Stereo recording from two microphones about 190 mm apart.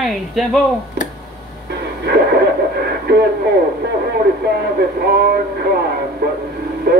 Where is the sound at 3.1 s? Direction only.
55° right (ahead or behind).